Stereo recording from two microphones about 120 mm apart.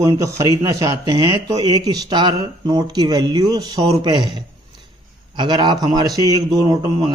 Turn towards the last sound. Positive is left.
turn(degrees=-35)  # may be behind; listen again after turning